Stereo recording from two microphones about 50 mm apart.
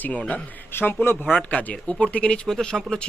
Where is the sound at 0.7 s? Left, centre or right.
Left.